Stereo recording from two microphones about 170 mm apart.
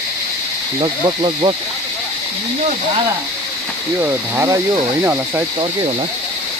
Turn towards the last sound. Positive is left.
turn(degrees=-15)  # may be behind; listen again after turning